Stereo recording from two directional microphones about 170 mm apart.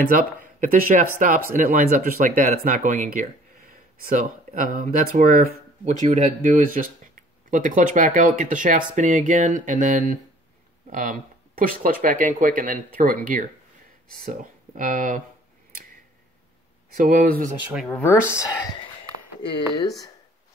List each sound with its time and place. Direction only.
0.1 s speech: 55° right (ahead or behind)
16.9 s speech: 55° right (ahead or behind)
17.7 s speech: centre (ahead or behind)
18.3 s speech: 20° left (ahead or behind)